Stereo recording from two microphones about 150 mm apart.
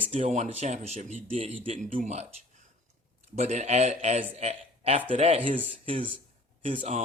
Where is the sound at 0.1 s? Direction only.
45° right (ahead or behind).